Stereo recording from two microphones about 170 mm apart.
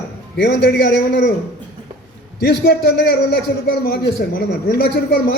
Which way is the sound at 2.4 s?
90° left.